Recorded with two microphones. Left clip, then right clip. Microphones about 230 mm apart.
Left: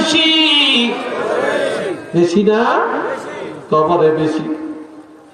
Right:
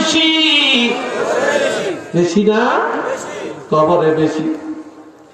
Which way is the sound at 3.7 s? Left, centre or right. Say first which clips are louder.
Even; left.